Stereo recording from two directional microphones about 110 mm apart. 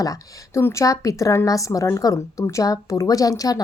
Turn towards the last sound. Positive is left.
turn(degrees=35)  # may be behind; listen again after turning